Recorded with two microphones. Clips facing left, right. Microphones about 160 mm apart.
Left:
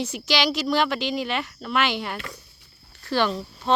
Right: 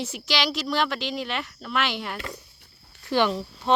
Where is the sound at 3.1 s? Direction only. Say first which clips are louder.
Right 1 dB; 15° right (ahead or behind).